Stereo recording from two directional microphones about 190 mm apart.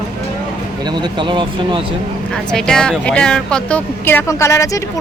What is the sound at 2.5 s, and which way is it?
Speech, 5° left (ahead or behind).